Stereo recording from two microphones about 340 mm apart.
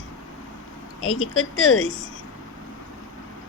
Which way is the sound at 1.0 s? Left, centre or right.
Left.